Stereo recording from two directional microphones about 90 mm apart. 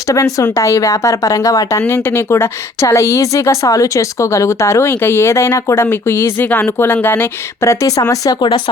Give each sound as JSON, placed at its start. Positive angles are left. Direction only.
{"t": 0.1, "sound": "speech", "side_deg": 35}
{"t": 1.9, "sound": "speech", "side_deg": 30}
{"t": 8.4, "sound": "speech", "side_deg": 65}